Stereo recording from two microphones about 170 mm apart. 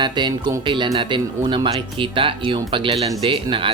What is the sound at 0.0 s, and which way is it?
Speech, 25° right (ahead or behind).